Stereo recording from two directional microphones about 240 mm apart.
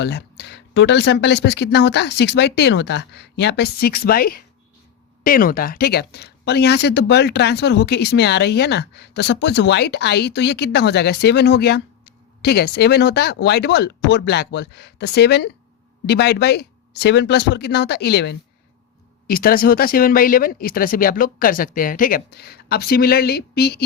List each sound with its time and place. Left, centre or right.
0.0 s speech: left